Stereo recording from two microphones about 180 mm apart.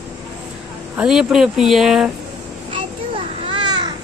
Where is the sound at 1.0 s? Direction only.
5° right (ahead or behind).